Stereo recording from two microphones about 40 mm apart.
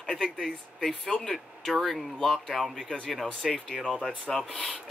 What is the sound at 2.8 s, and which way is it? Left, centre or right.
Speech, centre.